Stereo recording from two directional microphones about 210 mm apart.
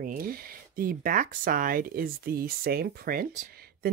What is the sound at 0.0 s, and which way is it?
Speech, 40° right (ahead or behind).